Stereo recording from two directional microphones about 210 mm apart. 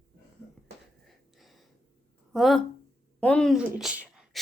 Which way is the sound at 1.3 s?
Centre (ahead or behind).